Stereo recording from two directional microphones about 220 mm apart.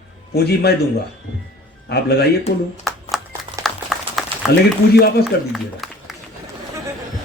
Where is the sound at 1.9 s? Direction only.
50° left (ahead or behind).